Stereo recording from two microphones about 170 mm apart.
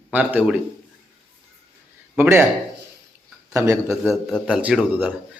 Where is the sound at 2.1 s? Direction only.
15° right (ahead or behind).